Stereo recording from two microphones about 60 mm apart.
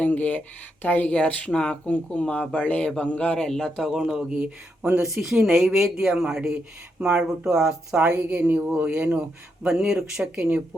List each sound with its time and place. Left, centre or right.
0.0 s speech: left
3.4 s speech: centre
3.8 s speech: centre
5.0 s speech: centre